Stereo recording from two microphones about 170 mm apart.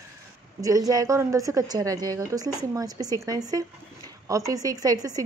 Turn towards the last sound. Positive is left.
turn(degrees=-20)  # may be behind; listen again after turning